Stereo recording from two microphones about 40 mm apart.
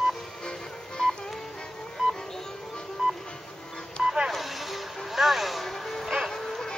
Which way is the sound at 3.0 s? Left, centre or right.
Centre.